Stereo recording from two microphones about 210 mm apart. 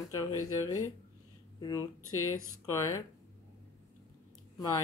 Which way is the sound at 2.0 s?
90° left.